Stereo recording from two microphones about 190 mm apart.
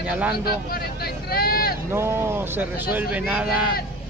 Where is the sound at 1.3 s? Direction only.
50° left (ahead or behind).